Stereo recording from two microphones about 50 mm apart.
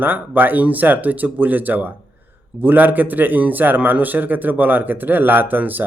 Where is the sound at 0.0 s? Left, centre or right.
Right.